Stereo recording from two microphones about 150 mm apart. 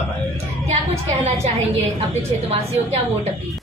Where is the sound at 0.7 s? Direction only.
45° right (ahead or behind).